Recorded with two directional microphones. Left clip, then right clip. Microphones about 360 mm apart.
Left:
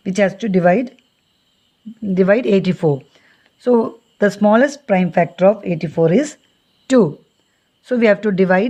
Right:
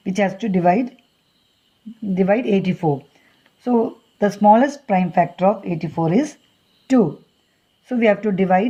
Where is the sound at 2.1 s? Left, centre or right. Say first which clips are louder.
Left 4 dB; left.